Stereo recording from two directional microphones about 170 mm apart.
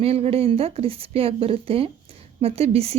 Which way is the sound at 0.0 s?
35° right (ahead or behind).